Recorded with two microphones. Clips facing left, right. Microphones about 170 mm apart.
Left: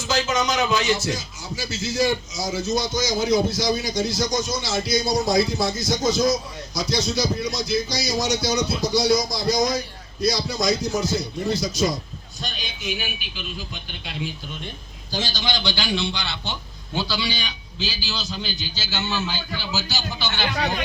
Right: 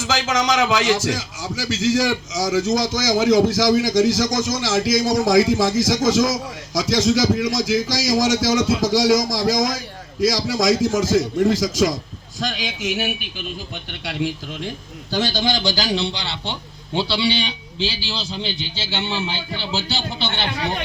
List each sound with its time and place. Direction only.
0.0 s a man's voice: 90° right
15.1 s a man's voice: 60° right (ahead or behind); by 20.6 s 25° right (ahead or behind)